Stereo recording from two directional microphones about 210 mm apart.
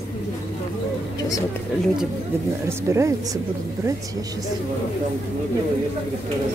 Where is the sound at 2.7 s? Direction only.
15° right (ahead or behind).